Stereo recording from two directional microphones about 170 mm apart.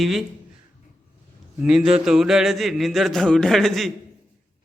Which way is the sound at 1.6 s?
5° right (ahead or behind).